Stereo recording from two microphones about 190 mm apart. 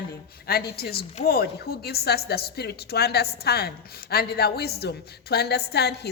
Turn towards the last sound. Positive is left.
turn(degrees=60)  # may be behind; listen again after turning